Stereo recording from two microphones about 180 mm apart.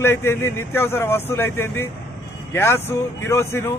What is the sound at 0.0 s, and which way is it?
A man's voice, 15° left (ahead or behind).